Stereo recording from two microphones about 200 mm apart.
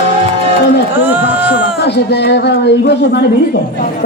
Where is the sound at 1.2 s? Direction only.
60° left (ahead or behind).